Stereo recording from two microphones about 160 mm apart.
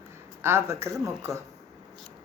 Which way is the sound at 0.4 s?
15° right (ahead or behind).